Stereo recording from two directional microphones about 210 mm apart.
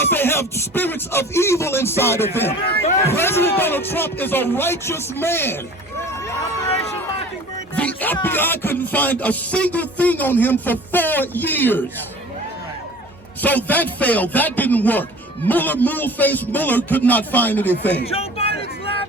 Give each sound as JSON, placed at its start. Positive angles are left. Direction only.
{"t": 0.0, "sound": "music", "side_deg": 10}
{"t": 7.8, "sound": "music", "side_deg": 5}
{"t": 13.4, "sound": "music", "side_deg": 10}
{"t": 18.0, "sound": "a sound", "side_deg": 30}